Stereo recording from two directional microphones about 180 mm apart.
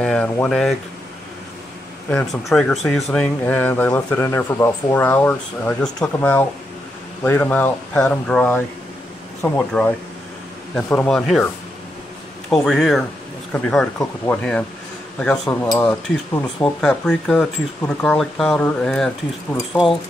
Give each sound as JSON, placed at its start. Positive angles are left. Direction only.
{"t": 0.0, "sound": "speech", "side_deg": 5}
{"t": 2.0, "sound": "speech", "side_deg": 5}
{"t": 12.4, "sound": "speech", "side_deg": 5}